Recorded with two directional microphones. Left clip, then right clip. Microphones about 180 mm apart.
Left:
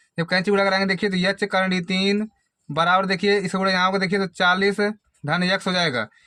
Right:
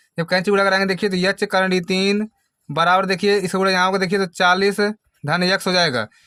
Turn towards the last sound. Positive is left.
turn(degrees=-35)  # may be behind; listen again after turning